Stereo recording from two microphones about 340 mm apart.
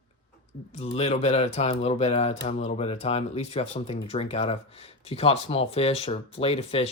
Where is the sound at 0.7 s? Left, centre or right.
Centre.